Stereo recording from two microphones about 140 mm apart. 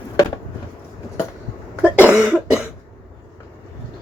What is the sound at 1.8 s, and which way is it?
Cough, 10° right (ahead or behind).